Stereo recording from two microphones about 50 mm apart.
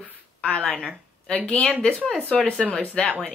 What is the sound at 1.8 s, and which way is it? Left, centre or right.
A woman's voice, centre.